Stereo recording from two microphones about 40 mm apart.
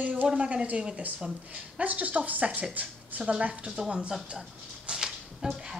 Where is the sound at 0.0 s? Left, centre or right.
Right.